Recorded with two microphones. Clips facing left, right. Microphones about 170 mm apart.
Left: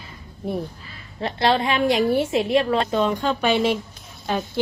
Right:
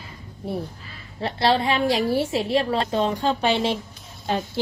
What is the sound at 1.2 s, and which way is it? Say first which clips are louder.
A woman's voice: even; 30° right (ahead or behind).